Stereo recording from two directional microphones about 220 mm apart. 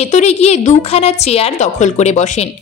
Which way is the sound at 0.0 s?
30° left (ahead or behind).